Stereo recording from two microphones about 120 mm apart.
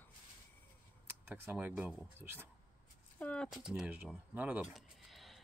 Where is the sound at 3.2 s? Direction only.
10° left (ahead or behind).